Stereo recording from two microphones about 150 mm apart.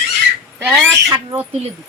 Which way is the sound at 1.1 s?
30° right (ahead or behind).